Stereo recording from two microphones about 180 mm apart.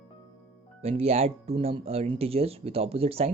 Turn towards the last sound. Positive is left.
turn(degrees=-35)  # may be behind; listen again after turning